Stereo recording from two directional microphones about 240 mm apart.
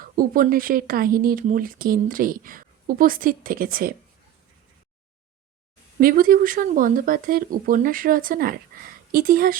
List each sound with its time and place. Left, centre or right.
0.0 s speech: right
6.0 s speech: right